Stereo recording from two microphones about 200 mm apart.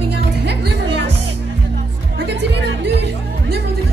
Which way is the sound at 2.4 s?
60° right (ahead or behind).